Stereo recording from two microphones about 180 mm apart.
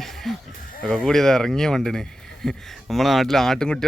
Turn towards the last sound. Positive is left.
turn(degrees=5)  # may be behind; listen again after turning